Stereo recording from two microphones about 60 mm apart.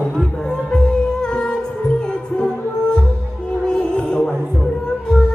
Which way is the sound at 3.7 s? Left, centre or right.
Centre.